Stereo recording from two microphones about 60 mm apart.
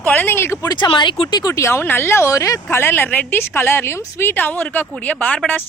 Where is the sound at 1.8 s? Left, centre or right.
Left.